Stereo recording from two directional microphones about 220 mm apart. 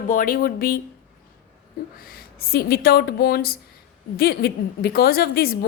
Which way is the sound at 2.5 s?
45° left (ahead or behind).